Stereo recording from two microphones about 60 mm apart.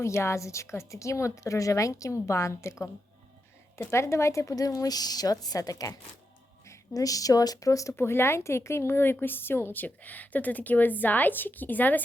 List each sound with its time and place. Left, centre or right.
0.0 s a woman's voice: left
6.9 s a woman's voice: left
7.9 s a woman's voice: left